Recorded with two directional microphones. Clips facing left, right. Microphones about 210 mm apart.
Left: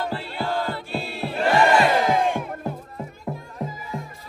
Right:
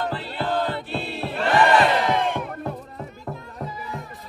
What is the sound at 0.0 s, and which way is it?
Music, centre (ahead or behind).